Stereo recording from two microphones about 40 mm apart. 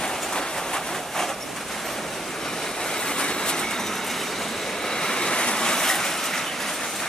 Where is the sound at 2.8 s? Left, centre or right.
Centre.